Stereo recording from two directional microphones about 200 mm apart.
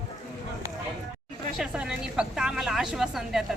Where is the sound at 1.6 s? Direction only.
5° right (ahead or behind).